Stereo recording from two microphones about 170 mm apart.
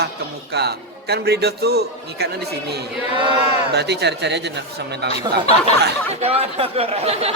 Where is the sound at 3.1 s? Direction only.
30° right (ahead or behind).